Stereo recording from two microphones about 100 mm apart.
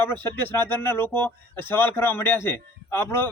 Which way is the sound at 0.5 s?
25° left (ahead or behind).